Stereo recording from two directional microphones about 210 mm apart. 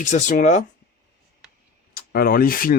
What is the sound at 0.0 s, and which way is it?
Speech, 35° left (ahead or behind).